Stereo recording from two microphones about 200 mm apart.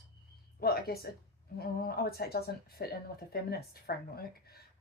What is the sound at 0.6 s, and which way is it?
Speech, 50° left (ahead or behind).